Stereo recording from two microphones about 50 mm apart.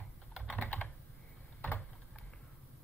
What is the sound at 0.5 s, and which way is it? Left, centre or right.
Computer keyboard, left.